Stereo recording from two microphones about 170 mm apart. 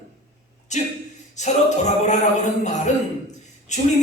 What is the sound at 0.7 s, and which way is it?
Speech, 45° left (ahead or behind).